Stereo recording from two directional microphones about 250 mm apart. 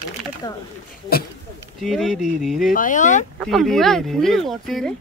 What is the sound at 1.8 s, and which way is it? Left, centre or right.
Speech, centre.